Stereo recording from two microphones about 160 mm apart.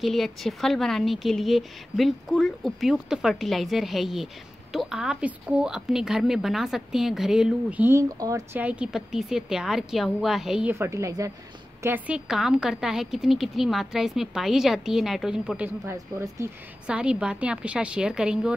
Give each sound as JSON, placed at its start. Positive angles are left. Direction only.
{"t": 0.0, "sound": "a woman's voice", "side_deg": 0}
{"t": 8.5, "sound": "a woman's voice", "side_deg": -5}
{"t": 10.7, "sound": "a woman's voice", "side_deg": -15}
{"t": 16.8, "sound": "a woman's voice", "side_deg": -5}